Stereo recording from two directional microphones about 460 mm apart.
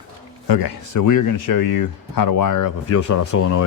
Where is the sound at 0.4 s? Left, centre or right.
Left.